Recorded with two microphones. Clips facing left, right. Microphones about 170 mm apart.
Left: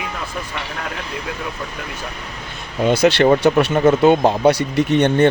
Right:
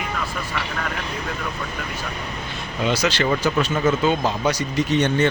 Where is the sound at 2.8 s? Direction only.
55° left (ahead or behind).